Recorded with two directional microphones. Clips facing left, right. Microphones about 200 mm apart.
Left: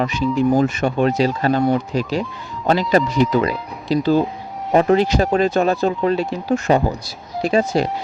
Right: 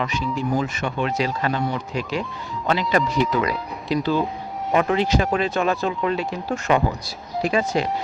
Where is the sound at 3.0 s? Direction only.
Centre (ahead or behind).